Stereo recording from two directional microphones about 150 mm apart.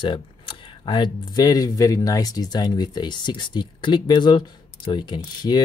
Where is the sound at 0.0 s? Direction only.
35° left (ahead or behind).